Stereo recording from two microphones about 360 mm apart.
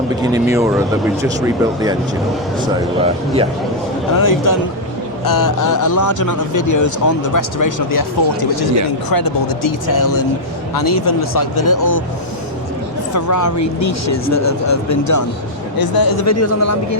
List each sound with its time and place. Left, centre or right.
0.2 s speech: centre
4.2 s a man's voice: left
13.1 s speech: left
15.8 s speech: left
16.2 s speech: left